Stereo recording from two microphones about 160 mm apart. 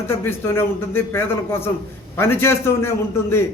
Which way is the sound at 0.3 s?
15° left (ahead or behind).